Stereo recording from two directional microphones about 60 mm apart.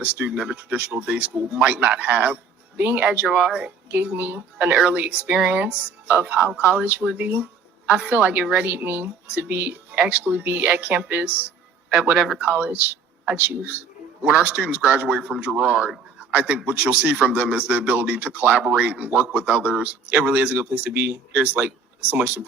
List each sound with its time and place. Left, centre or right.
0.0 s a man's voice: right
3.2 s speech: centre
3.6 s a man's voice: right
6.8 s a man's voice: right
7.9 s a woman's voice: centre
8.1 s a man's voice: right
12.1 s speech: centre
12.4 s a man's voice: right
16.1 s a sound: right
16.6 s a man's voice: right
18.6 s speech: centre
18.9 s a man's voice: right